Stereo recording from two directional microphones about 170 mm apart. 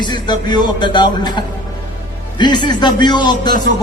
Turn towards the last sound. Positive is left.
turn(degrees=25)  # may be behind; listen again after turning